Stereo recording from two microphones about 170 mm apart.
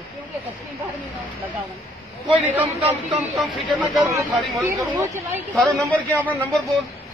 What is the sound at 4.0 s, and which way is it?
Speech, 20° right (ahead or behind).